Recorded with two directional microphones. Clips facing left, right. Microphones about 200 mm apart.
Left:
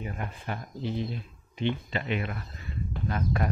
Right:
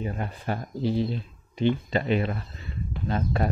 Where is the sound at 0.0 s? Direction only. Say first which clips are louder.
Right 5 dB; 35° right (ahead or behind).